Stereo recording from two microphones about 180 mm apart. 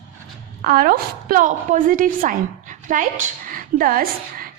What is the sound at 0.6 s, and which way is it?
A woman's voice, 55° right (ahead or behind).